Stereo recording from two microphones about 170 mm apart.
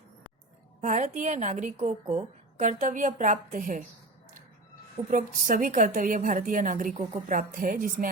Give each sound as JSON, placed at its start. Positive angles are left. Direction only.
{"t": 0.8, "sound": "a woman's voice", "side_deg": -45}
{"t": 5.1, "sound": "a woman's voice", "side_deg": -50}
{"t": 6.9, "sound": "a woman's voice", "side_deg": -35}
{"t": 7.3, "sound": "a woman's voice", "side_deg": -50}